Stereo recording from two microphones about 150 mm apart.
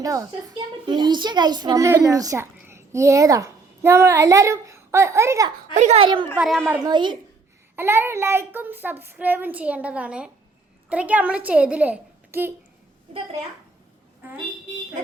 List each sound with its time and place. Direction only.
0.0 s a woman's voice: 20° right (ahead or behind)
0.3 s a woman's voice: 30° right (ahead or behind)
5.7 s speech: 50° right (ahead or behind)
6.3 s speech: 5° right (ahead or behind)
6.8 s a child's voice: 30° right (ahead or behind)
7.8 s a child's voice: 15° right (ahead or behind)